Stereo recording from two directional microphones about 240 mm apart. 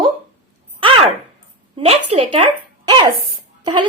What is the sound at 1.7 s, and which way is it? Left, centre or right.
Speech, right.